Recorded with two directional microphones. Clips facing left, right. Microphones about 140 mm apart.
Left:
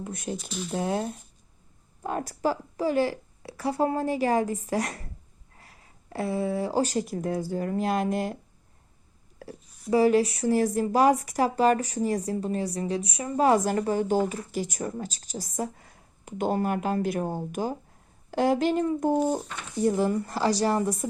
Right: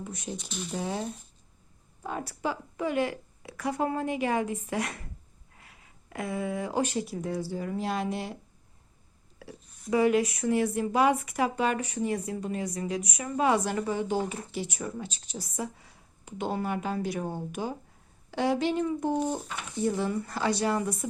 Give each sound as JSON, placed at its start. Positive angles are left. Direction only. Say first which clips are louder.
{"t": 0.0, "sound": "speech", "louder": "left 4 dB", "side_deg": 55}
{"t": 0.3, "sound": "speech", "louder": "left 3 dB", "side_deg": 0}
{"t": 0.7, "sound": "speech", "louder": "left 5 dB", "side_deg": 55}
{"t": 9.4, "sound": "a sound", "louder": "left 4 dB", "side_deg": 45}
{"t": 9.9, "sound": "speech", "louder": "left 3 dB", "side_deg": 30}